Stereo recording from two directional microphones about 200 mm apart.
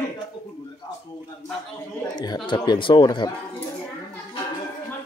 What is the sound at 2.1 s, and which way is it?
Speech, 20° left (ahead or behind).